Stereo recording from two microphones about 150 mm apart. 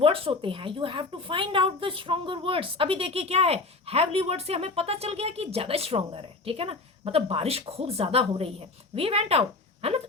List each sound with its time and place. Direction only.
0.0 s a woman's voice: 35° right (ahead or behind)